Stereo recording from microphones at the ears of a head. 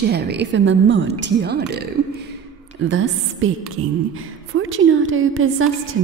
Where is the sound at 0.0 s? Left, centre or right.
Right.